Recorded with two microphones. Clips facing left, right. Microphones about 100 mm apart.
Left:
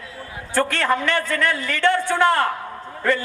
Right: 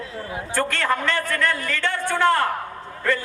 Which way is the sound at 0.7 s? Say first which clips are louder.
Left 2 dB; 15° left (ahead or behind).